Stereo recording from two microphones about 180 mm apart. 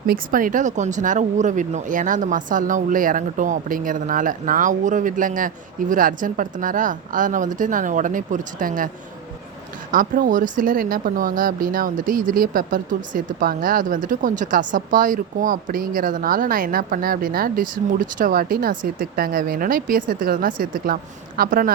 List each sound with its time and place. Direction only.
0.1 s speech: 50° right (ahead or behind)
9.9 s speech: 50° right (ahead or behind)